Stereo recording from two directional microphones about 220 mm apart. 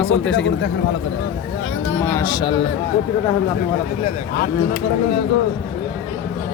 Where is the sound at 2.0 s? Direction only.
10° left (ahead or behind).